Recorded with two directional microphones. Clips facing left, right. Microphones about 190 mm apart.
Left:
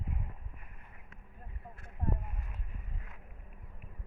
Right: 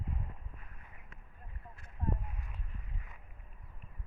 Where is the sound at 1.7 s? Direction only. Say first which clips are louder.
Left 1 dB; 55° left (ahead or behind).